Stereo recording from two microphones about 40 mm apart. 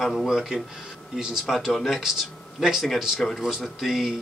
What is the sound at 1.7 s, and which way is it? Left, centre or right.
Speech, centre.